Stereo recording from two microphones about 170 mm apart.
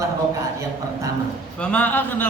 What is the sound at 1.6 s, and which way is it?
Speech, 10° left (ahead or behind).